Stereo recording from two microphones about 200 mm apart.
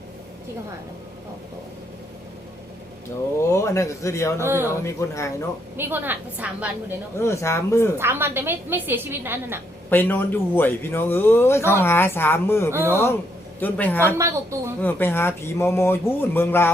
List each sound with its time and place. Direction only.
3.5 s a man's voice: 15° left (ahead or behind)
4.4 s a woman's voice: 10° right (ahead or behind)
4.8 s a man's voice: 15° left (ahead or behind)
5.7 s a woman's voice: 10° right (ahead or behind)
7.2 s a man's voice: 15° left (ahead or behind)
7.9 s a woman's voice: 10° right (ahead or behind)
9.9 s a man's voice: 10° left (ahead or behind)
14.2 s a woman's voice: 15° right (ahead or behind)
14.8 s a man's voice: 10° left (ahead or behind)